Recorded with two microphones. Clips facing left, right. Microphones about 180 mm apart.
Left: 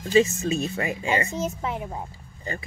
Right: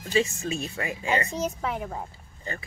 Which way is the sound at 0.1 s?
20° left (ahead or behind).